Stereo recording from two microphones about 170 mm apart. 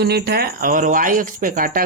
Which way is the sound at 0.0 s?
70° right (ahead or behind).